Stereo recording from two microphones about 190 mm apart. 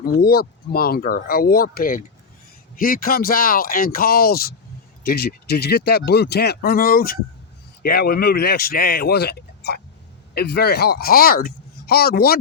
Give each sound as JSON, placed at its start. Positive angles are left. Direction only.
{"t": 0.0, "sound": "speech", "side_deg": 55}